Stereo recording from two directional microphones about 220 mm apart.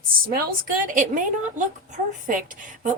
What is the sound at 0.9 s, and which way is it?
A woman's voice, 35° right (ahead or behind).